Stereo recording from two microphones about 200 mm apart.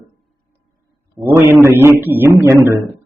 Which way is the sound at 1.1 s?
10° right (ahead or behind).